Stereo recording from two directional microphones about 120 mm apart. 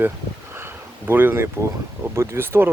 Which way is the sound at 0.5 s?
20° right (ahead or behind).